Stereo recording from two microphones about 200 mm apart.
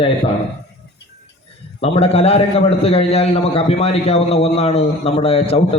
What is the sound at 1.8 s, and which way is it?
A man's voice, 30° left (ahead or behind).